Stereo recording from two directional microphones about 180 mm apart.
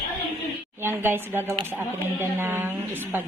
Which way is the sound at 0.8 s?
10° right (ahead or behind).